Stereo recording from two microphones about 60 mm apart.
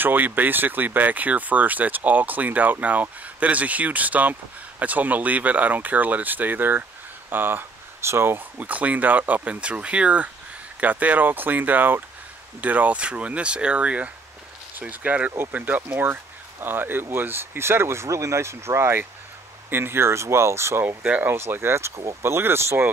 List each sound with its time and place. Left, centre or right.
0.0 s speech: right
8.5 s speech: right
21.0 s speech: right
21.4 s speech: right